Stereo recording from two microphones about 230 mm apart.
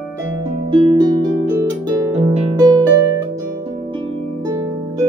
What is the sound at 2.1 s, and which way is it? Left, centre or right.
Music, right.